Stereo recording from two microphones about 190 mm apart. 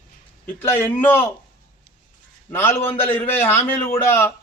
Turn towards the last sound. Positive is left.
turn(degrees=10)  # may be behind; listen again after turning